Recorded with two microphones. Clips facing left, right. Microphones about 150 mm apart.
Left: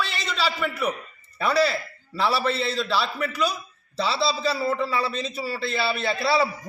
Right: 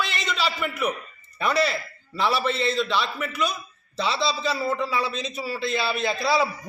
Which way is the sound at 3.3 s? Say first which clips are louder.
Even; 35° left (ahead or behind).